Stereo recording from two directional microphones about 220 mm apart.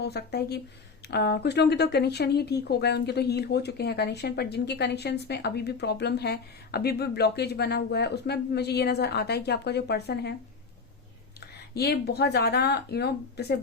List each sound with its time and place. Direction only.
0.0 s speech: 50° left (ahead or behind)
11.7 s speech: 45° left (ahead or behind)